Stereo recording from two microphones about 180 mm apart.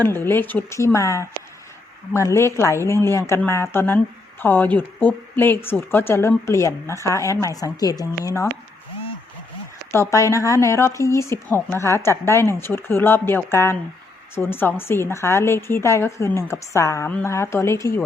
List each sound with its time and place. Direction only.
0.0 s a woman's voice: 10° left (ahead or behind)
9.9 s a woman's voice: 15° left (ahead or behind)